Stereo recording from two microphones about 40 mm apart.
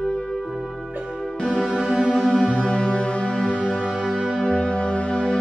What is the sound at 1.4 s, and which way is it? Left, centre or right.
Music, left.